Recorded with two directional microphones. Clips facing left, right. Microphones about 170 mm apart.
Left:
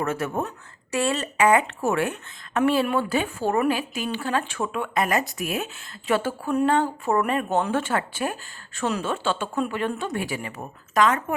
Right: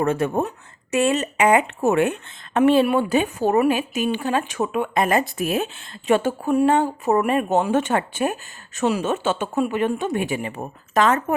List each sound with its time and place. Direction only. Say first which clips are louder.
0.0 s speech: right 5 dB; 30° right (ahead or behind)